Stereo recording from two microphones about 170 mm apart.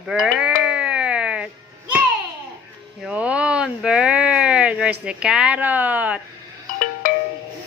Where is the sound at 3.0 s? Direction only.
5° right (ahead or behind).